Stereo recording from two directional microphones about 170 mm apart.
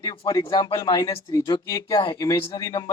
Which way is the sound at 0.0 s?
20° left (ahead or behind).